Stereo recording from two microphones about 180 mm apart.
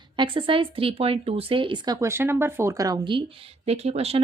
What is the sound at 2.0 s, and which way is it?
Speech, 15° right (ahead or behind).